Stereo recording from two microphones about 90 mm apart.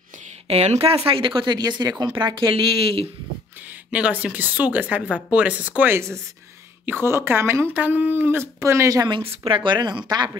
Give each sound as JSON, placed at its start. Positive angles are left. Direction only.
{"t": 0.7, "sound": "speech", "side_deg": -90}
{"t": 3.9, "sound": "speech", "side_deg": -15}
{"t": 5.9, "sound": "speech", "side_deg": -30}
{"t": 9.4, "sound": "speech", "side_deg": -70}